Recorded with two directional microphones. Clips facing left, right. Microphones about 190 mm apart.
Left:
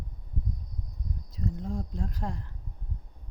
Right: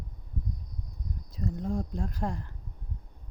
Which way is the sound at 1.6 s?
50° right (ahead or behind).